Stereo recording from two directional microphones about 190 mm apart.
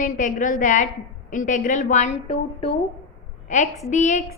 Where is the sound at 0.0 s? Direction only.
40° left (ahead or behind).